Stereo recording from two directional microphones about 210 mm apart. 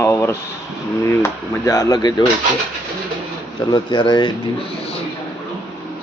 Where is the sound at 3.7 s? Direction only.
20° left (ahead or behind).